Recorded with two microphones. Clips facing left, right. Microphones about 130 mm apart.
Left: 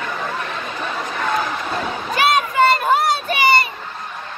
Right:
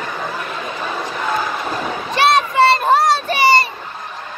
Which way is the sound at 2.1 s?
30° right (ahead or behind).